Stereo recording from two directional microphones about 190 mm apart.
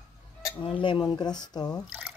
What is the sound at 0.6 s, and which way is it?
A woman's voice, 25° left (ahead or behind).